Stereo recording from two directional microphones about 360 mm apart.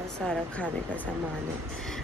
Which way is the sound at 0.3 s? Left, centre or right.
Centre.